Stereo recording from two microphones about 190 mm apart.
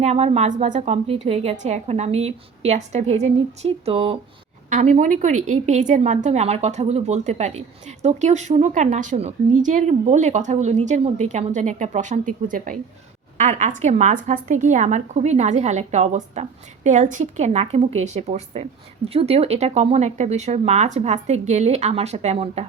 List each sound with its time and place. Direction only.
0.0 s a woman's voice: 35° right (ahead or behind)
4.7 s a woman's voice: 40° right (ahead or behind)